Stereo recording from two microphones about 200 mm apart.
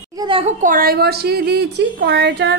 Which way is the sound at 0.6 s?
45° right (ahead or behind).